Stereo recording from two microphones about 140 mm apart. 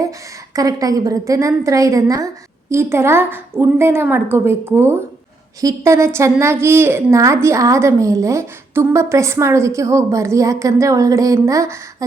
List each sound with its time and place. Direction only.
0.5 s a woman's voice: 25° right (ahead or behind)